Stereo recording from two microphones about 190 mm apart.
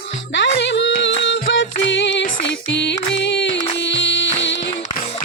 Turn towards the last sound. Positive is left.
turn(degrees=75)  # may be behind; listen again after turning